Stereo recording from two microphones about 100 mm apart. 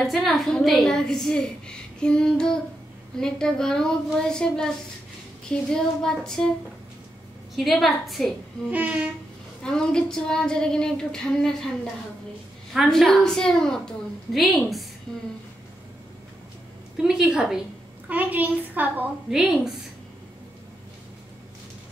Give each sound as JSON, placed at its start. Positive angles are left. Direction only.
{"t": 0.0, "sound": "a woman's voice", "side_deg": 0}
{"t": 7.5, "sound": "a woman's voice", "side_deg": 0}
{"t": 8.6, "sound": "a child's voice", "side_deg": -15}
{"t": 9.6, "sound": "a woman's voice", "side_deg": 5}
{"t": 12.7, "sound": "a woman's voice", "side_deg": 5}
{"t": 16.9, "sound": "a woman's voice", "side_deg": -5}
{"t": 19.3, "sound": "a woman's voice", "side_deg": -5}